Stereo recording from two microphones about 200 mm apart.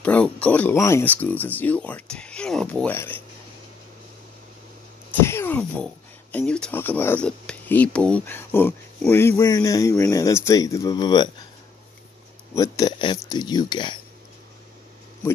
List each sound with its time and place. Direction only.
0.0 s speech: 5° left (ahead or behind)
5.2 s a sound: 10° left (ahead or behind)
6.3 s speech: 5° left (ahead or behind); by 11.2 s 20° left (ahead or behind)
12.5 s speech: 15° left (ahead or behind)